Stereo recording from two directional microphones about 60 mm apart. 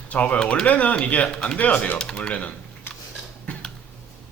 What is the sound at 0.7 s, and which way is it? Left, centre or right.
Speech, left.